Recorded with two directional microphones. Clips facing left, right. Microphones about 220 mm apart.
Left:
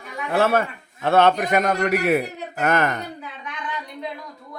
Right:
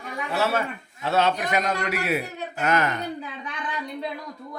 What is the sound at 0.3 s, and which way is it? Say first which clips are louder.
A man's voice: left 5 dB; 55° left (ahead or behind).